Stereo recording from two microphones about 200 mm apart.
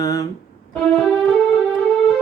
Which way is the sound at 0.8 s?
5° left (ahead or behind).